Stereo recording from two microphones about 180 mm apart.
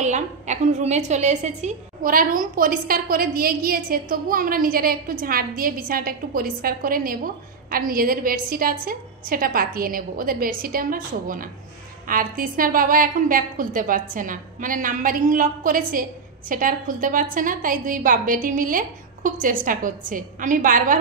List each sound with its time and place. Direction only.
0.0 s a woman's voice: 40° right (ahead or behind)